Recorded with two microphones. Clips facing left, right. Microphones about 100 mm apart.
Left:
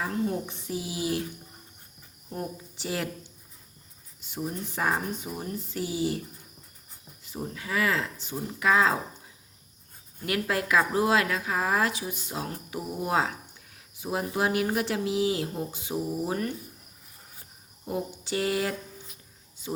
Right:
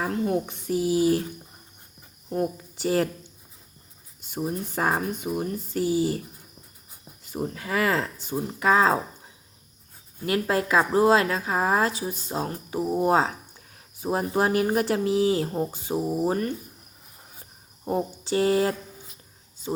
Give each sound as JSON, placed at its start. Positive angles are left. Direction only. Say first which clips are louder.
{"t": 0.3, "sound": "speech", "louder": "right 6 dB", "side_deg": -50}
{"t": 2.3, "sound": "speech", "louder": "right 8 dB", "side_deg": -50}
{"t": 4.3, "sound": "speech", "louder": "right 4 dB", "side_deg": -40}
{"t": 5.8, "sound": "a woman's voice", "louder": "right 5 dB", "side_deg": -40}
{"t": 7.3, "sound": "speech", "louder": "right 5 dB", "side_deg": -50}
{"t": 10.2, "sound": "a woman's voice", "louder": "right 4 dB", "side_deg": -30}
{"t": 17.8, "sound": "a woman's voice", "louder": "right 5 dB", "side_deg": -35}